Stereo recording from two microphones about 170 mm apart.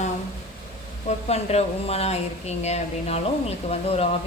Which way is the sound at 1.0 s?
40° left (ahead or behind).